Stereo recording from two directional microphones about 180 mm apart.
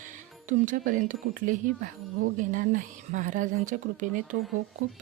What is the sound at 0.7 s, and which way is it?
Speech, 50° right (ahead or behind).